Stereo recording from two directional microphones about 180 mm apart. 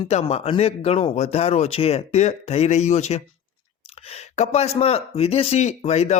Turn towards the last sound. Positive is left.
turn(degrees=40)  # may be behind; listen again after turning